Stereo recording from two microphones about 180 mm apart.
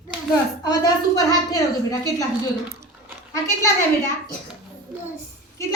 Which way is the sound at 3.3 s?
15° left (ahead or behind).